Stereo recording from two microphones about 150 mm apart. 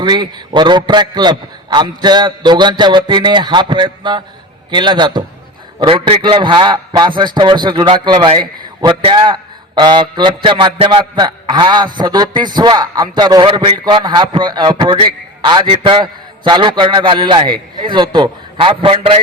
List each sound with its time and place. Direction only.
0.0 s a man's voice: 30° right (ahead or behind)